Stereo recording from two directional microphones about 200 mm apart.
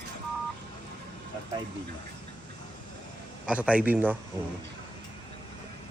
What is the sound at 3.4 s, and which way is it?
Speech, 5° right (ahead or behind).